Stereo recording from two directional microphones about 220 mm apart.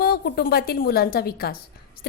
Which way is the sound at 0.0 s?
45° left (ahead or behind).